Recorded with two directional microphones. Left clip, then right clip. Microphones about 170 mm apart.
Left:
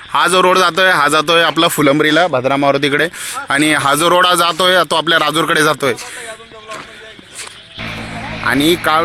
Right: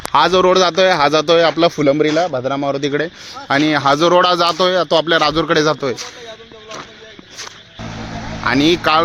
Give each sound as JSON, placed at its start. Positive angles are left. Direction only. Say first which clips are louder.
{"t": 0.1, "sound": "speech", "louder": "left 1 dB", "side_deg": 0}
{"t": 3.4, "sound": "speech", "louder": "left 1 dB", "side_deg": 0}
{"t": 8.4, "sound": "speech", "louder": "left 1 dB", "side_deg": -5}